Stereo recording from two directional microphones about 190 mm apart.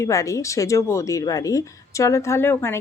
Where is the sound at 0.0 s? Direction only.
15° left (ahead or behind).